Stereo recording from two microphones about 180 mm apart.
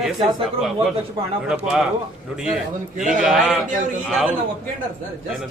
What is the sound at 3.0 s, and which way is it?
Speech, centre (ahead or behind).